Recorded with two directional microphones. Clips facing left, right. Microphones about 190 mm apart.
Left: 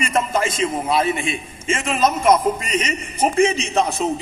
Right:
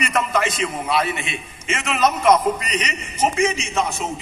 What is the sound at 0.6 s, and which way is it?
Speech, 25° left (ahead or behind).